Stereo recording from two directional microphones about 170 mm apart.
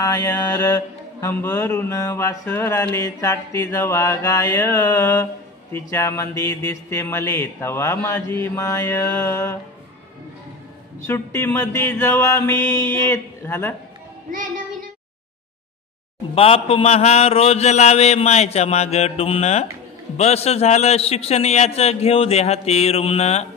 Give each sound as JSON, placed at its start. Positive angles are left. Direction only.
{"t": 0.0, "sound": "mantra", "side_deg": 20}
{"t": 11.1, "sound": "mantra", "side_deg": 15}
{"t": 16.3, "sound": "a man's voice", "side_deg": 35}